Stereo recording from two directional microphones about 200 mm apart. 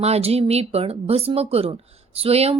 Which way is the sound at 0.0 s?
30° right (ahead or behind).